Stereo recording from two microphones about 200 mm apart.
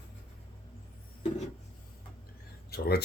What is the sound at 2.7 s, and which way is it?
Speech, 55° left (ahead or behind).